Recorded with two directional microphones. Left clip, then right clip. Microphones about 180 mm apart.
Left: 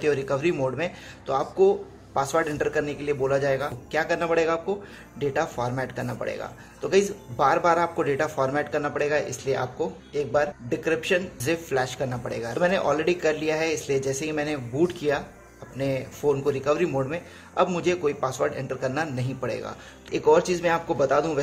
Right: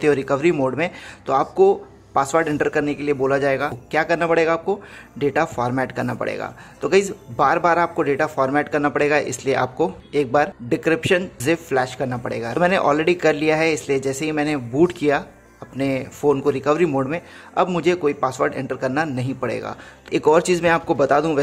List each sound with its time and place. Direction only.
0.0 s speech: 35° right (ahead or behind)